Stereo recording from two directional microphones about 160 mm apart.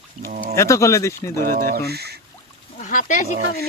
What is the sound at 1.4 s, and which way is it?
Speech, 60° right (ahead or behind).